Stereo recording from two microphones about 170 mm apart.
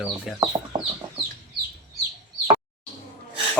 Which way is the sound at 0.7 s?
25° right (ahead or behind).